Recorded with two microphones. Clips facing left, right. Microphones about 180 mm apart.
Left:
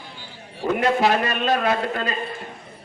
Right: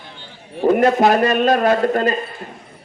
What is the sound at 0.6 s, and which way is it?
A man's voice, 40° right (ahead or behind).